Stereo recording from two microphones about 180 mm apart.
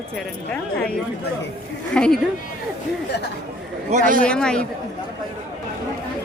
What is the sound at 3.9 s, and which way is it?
Speech, 40° right (ahead or behind).